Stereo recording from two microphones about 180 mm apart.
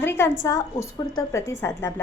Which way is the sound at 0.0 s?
15° left (ahead or behind).